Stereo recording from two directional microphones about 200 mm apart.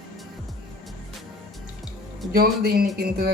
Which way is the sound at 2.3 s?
50° right (ahead or behind).